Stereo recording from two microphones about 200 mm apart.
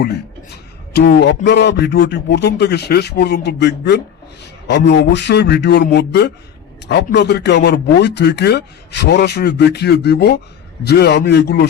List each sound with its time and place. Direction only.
0.5 s a man's voice: 55° left (ahead or behind)